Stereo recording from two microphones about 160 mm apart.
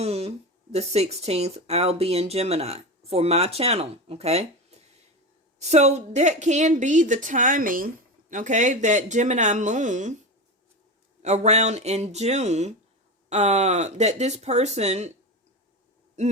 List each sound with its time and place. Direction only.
0.0 s a woman's voice: 40° right (ahead or behind)
11.2 s a woman's voice: 45° right (ahead or behind)